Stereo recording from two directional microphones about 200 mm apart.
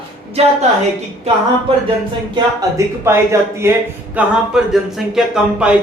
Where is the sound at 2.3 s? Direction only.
15° right (ahead or behind).